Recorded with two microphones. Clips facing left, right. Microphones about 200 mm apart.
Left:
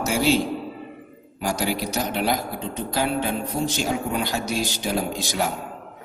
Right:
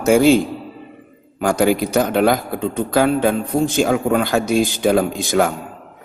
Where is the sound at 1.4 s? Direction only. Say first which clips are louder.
Right 9 dB; 50° right (ahead or behind).